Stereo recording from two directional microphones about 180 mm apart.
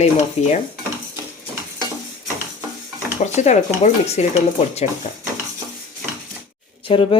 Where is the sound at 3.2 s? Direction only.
40° left (ahead or behind).